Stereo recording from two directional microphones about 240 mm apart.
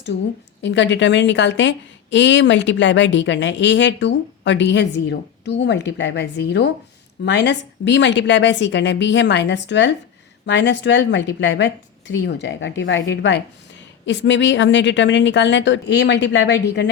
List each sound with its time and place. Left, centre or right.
0.6 s a woman's voice: left